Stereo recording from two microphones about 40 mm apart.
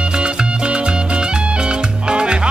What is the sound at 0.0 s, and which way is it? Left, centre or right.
Music, right.